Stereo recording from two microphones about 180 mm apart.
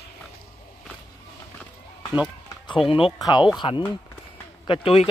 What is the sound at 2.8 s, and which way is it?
Speech, 30° left (ahead or behind).